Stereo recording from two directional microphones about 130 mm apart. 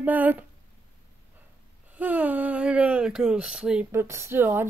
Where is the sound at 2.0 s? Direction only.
10° right (ahead or behind).